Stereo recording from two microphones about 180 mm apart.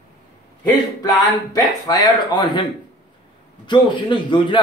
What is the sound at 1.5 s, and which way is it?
A man's voice, 20° left (ahead or behind).